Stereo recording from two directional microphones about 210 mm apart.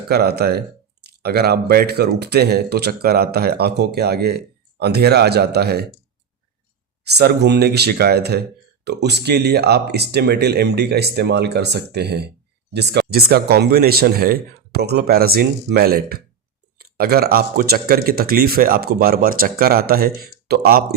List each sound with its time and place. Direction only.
0.1 s speech: 50° right (ahead or behind)
7.0 s speech: 50° right (ahead or behind)